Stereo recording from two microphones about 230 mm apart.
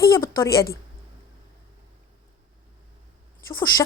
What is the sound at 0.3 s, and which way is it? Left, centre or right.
Speech, centre.